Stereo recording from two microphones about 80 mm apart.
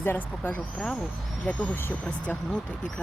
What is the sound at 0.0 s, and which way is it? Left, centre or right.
Speech, left.